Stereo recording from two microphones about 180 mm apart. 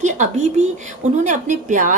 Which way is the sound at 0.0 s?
40° right (ahead or behind).